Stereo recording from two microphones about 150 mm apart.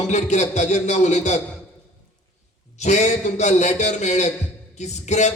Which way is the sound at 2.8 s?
50° left (ahead or behind).